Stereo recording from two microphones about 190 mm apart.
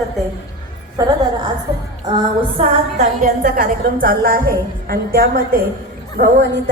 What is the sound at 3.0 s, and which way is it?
A woman's voice, 45° right (ahead or behind).